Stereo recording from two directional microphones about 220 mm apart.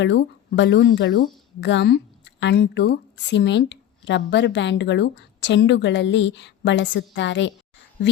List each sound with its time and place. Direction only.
0.0 s speech: 55° left (ahead or behind)